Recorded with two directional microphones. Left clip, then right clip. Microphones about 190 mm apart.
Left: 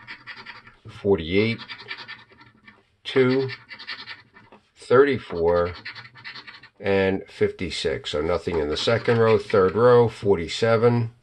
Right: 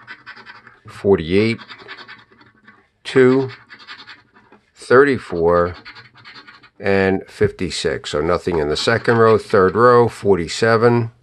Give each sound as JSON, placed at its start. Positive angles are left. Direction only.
{"t": 0.8, "sound": "scratch", "side_deg": -50}
{"t": 3.0, "sound": "speech", "side_deg": -45}
{"t": 4.7, "sound": "speech", "side_deg": -40}
{"t": 6.8, "sound": "speech", "side_deg": -40}